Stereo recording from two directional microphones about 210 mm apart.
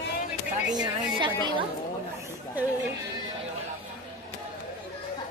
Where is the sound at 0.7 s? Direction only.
20° right (ahead or behind).